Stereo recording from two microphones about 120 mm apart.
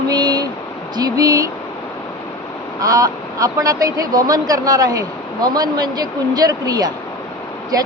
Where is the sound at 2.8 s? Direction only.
30° right (ahead or behind).